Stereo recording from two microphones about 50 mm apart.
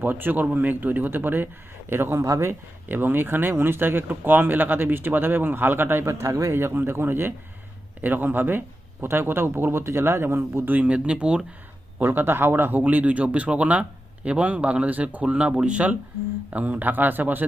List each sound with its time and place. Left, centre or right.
0.0 s speech: right
2.2 s speech: right
2.5 s speech: right
6.5 s speech: right
8.0 s speech: right
10.7 s speech: right
12.0 s speech: right
12.8 s speech: right